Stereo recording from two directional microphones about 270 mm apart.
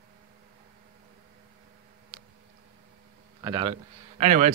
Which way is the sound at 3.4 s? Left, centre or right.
Centre.